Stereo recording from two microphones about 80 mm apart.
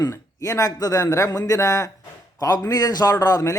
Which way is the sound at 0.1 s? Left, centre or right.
Left.